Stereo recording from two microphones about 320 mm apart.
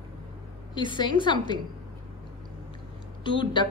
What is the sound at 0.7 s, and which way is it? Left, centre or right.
Speech, centre.